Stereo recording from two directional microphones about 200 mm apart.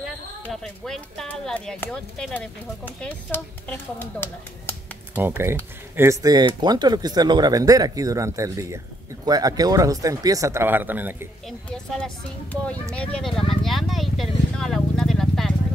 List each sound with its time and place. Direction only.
0.0 s speech: centre (ahead or behind)
5.1 s speech: 10° right (ahead or behind)
11.4 s speech: 5° left (ahead or behind)
13.7 s a sound: centre (ahead or behind)